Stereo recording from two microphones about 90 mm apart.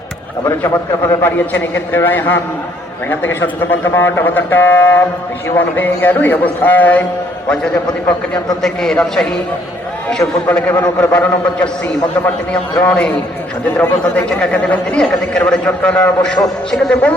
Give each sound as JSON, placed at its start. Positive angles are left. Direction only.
{"t": 0.7, "sound": "a man's voice", "side_deg": 25}
{"t": 10.5, "sound": "a man's voice", "side_deg": 20}
{"t": 12.8, "sound": "a man's voice", "side_deg": 15}
{"t": 16.4, "sound": "a man's voice", "side_deg": 0}
{"t": 16.9, "sound": "a man's voice", "side_deg": 15}